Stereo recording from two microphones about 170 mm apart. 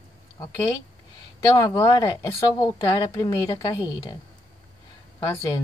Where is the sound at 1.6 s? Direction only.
20° left (ahead or behind).